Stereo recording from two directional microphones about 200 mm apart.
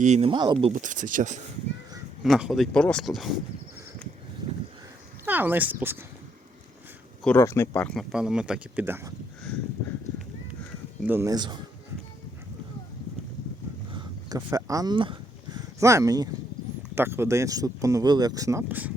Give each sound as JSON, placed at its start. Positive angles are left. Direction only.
{"t": 0.0, "sound": "speech", "side_deg": -30}
{"t": 0.7, "sound": "speech", "side_deg": -40}
{"t": 2.2, "sound": "speech", "side_deg": 0}
{"t": 5.2, "sound": "speech", "side_deg": -10}
{"t": 7.3, "sound": "speech", "side_deg": 15}
{"t": 11.0, "sound": "speech", "side_deg": -10}
{"t": 13.9, "sound": "a sound", "side_deg": -20}
{"t": 15.5, "sound": "speech", "side_deg": -15}